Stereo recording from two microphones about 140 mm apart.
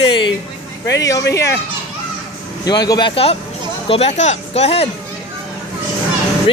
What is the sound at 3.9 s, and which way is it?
Speech, 50° left (ahead or behind).